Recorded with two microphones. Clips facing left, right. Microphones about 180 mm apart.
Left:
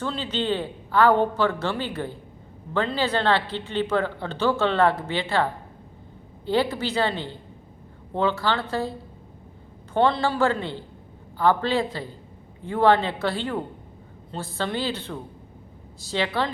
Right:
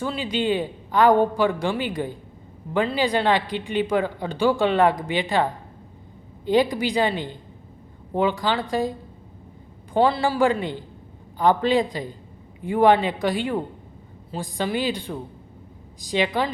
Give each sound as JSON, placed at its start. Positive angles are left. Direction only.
{"t": 0.0, "sound": "a man's voice", "side_deg": -10}